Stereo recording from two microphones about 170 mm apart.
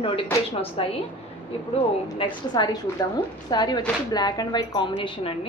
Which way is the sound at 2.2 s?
25° left (ahead or behind).